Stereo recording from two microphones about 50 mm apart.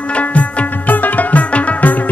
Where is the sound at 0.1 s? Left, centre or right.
Left.